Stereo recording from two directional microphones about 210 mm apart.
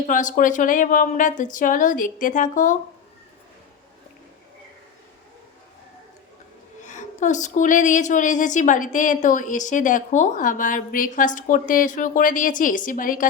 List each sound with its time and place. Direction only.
0.0 s a woman's voice: 35° left (ahead or behind)
6.8 s a woman's voice: 35° left (ahead or behind)